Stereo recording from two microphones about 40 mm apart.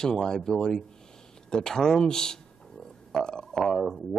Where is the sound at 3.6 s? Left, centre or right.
Centre.